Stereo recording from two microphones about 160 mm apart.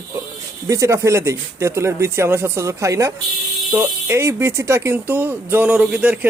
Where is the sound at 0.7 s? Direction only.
20° right (ahead or behind).